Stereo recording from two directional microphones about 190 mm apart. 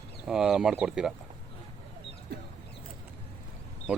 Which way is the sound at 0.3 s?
5° right (ahead or behind).